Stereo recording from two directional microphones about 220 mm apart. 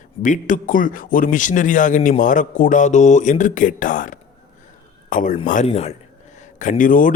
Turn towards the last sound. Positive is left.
turn(degrees=35)  # may be behind; listen again after turning